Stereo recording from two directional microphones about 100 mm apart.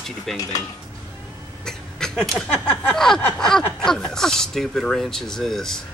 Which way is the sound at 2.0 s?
5° left (ahead or behind).